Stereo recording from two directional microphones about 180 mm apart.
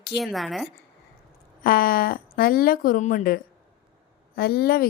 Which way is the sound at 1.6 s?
55° left (ahead or behind).